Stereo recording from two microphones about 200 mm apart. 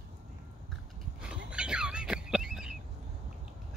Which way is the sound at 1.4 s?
5° right (ahead or behind).